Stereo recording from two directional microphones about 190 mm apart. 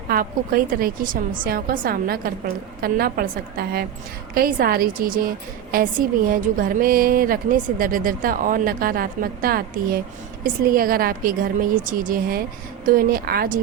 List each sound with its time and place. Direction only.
0.1 s a woman's voice: 50° right (ahead or behind)